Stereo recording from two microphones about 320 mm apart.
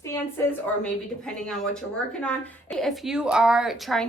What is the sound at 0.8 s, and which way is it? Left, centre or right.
A woman's voice, centre.